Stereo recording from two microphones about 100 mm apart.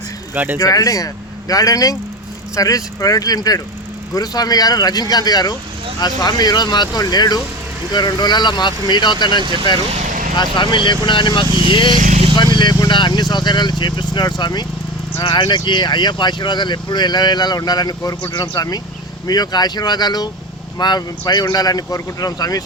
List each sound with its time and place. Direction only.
0.5 s speech: 35° left (ahead or behind)